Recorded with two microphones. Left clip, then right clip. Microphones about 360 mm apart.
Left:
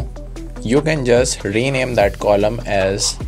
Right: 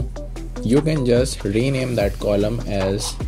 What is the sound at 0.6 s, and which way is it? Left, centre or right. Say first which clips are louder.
Speech: left 3 dB; centre.